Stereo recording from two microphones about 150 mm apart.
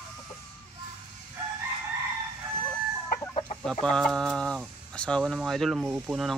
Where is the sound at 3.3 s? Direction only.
40° left (ahead or behind).